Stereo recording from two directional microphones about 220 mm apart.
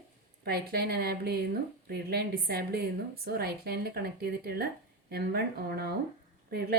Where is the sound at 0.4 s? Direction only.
45° right (ahead or behind).